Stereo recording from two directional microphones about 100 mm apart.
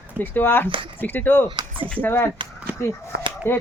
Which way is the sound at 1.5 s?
55° right (ahead or behind).